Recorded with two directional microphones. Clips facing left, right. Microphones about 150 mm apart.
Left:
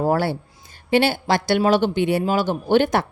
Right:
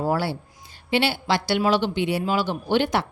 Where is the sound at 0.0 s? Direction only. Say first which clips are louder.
Left 4 dB; 50° left (ahead or behind).